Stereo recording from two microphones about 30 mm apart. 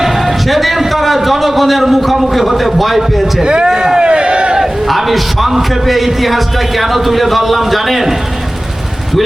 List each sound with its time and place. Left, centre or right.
0.0 s a man's voice: centre
3.4 s speech: right
3.7 s crowd: centre
4.9 s speech: centre